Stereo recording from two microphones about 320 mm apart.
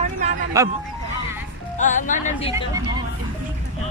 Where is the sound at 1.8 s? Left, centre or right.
Left.